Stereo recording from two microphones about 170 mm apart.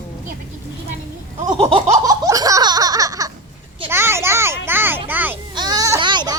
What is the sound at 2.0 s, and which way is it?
Laughter, 20° right (ahead or behind).